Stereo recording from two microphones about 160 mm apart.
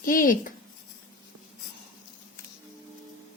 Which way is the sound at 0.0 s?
60° left (ahead or behind).